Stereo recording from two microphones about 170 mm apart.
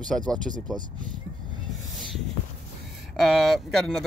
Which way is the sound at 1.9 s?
Centre (ahead or behind).